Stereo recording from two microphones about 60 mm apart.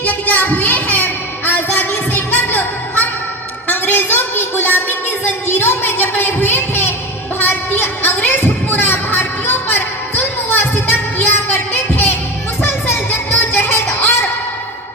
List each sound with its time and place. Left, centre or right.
0.0 s child singing: left
3.7 s a sound: left
12.6 s music: left